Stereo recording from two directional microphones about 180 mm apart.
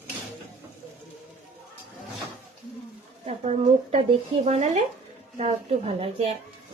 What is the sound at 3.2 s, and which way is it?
A woman's voice, 35° right (ahead or behind).